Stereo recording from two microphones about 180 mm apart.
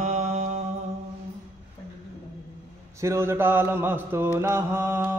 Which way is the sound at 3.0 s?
15° right (ahead or behind).